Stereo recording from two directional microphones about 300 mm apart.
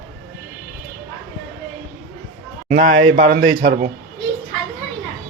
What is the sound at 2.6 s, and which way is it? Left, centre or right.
Speech, right.